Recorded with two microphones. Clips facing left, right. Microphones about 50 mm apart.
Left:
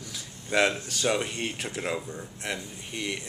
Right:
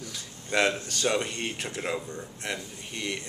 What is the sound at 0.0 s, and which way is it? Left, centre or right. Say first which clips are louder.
Speech: right 1 dB; centre.